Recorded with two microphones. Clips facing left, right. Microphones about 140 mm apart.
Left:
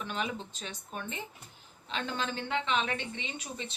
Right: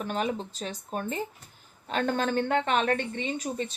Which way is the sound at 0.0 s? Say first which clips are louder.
Right 6 dB; 45° right (ahead or behind).